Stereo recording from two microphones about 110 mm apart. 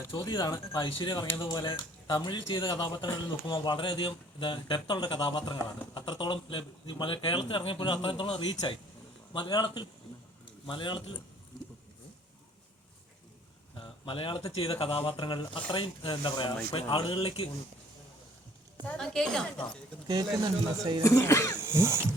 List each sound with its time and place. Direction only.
0.2 s a man's voice: 40° left (ahead or behind)
13.7 s a sound: 50° left (ahead or behind)
14.5 s a man's voice: 55° left (ahead or behind)
17.2 s a man's voice: 55° left (ahead or behind)
18.9 s a woman's voice: 5° left (ahead or behind)
20.1 s speech: 40° right (ahead or behind)
21.0 s speech: 25° left (ahead or behind)
21.6 s dog: 20° right (ahead or behind)